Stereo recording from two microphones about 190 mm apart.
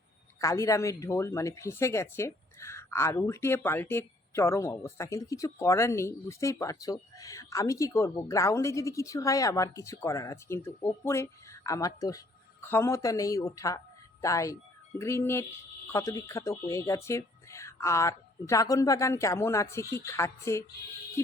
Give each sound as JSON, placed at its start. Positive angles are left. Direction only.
{"t": 0.3, "sound": "speech", "side_deg": 15}